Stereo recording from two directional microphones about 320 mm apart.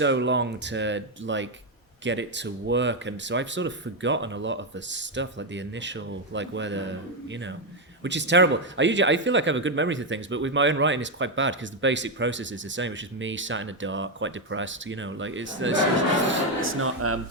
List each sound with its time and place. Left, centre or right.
0.0 s speech: right